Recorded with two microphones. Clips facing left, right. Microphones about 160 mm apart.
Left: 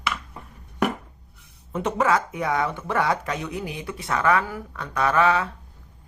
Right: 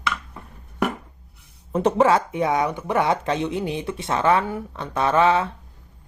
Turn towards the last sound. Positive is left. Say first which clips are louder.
# right 2 dB
turn(degrees=-25)  # may be behind; listen again after turning